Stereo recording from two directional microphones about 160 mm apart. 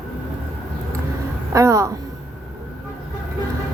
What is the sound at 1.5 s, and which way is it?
Speech, 20° right (ahead or behind).